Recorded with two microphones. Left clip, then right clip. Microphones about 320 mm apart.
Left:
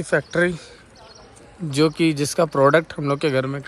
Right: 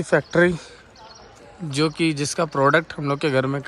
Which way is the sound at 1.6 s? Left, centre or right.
Centre.